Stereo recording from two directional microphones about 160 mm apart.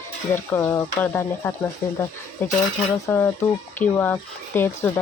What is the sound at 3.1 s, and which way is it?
Speech, 15° left (ahead or behind).